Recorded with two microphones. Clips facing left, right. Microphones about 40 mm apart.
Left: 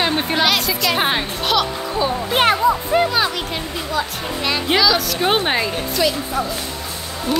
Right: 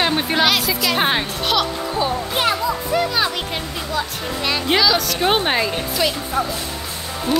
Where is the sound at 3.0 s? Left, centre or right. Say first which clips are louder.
Left 1 dB; left.